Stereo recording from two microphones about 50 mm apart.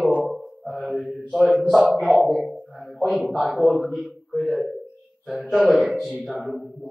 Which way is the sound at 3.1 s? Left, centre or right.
Centre.